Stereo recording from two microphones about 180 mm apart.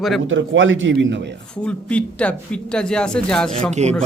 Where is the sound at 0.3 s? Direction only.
90° right.